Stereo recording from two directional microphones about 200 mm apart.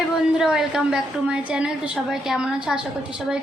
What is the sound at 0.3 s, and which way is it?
A woman's voice, 5° right (ahead or behind).